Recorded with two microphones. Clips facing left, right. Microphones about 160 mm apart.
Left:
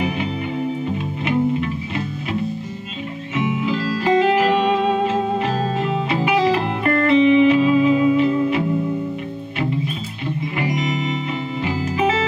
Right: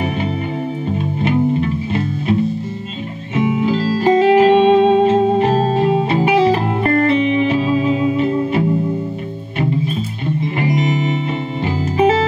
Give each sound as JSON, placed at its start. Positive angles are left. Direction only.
{"t": 3.3, "sound": "music", "side_deg": -35}
{"t": 10.7, "sound": "music", "side_deg": -30}